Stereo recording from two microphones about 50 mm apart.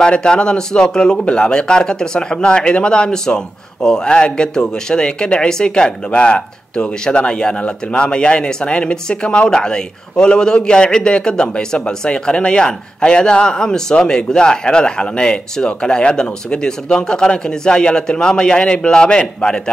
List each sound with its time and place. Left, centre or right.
0.0 s speech: centre